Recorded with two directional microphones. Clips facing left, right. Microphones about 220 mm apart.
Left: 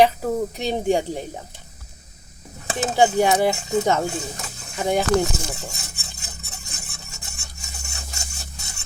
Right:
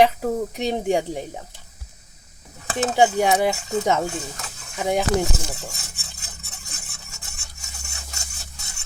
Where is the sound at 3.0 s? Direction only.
10° right (ahead or behind).